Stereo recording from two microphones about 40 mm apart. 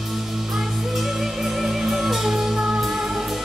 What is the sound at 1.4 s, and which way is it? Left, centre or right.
Music, centre.